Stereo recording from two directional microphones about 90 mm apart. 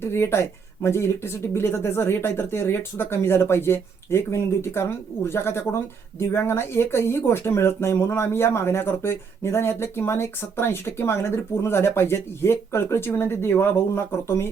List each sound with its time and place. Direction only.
0.0 s speech: 25° left (ahead or behind)